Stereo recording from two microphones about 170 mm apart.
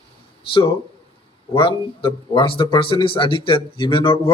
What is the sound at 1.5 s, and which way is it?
A man's voice, 30° left (ahead or behind).